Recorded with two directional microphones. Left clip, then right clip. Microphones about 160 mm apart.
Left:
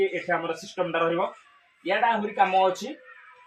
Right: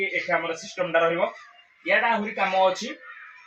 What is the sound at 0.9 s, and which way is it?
Speech, 10° left (ahead or behind).